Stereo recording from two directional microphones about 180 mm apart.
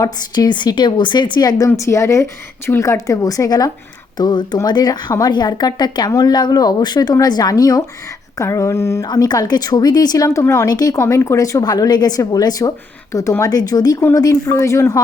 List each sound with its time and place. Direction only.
0.0 s speech: 25° left (ahead or behind)